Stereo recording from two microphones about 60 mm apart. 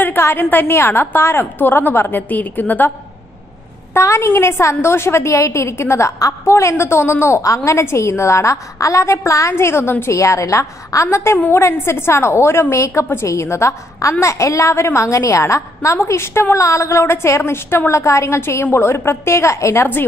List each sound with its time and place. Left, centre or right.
0.0 s a woman's voice: left
0.7 s a woman's voice: left
3.9 s a woman's voice: left
7.4 s a woman's voice: left
9.7 s a woman's voice: left
10.1 s a woman's voice: left
16.5 s a woman's voice: left
17.4 s a woman's voice: left